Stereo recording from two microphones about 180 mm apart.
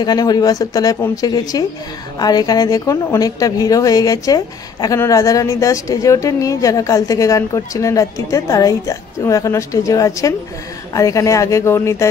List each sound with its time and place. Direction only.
0.0 s a woman's voice: 20° left (ahead or behind)